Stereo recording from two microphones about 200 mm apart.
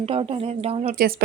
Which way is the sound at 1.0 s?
45° right (ahead or behind).